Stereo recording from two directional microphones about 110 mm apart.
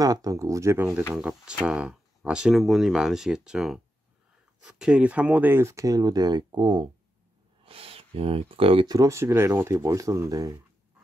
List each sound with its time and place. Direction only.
0.0 s speech: 35° right (ahead or behind)
1.1 s speech: 5° right (ahead or behind); by 6.9 s 45° right (ahead or behind)
7.6 s speech: 60° right (ahead or behind)
8.8 s speech: 30° right (ahead or behind)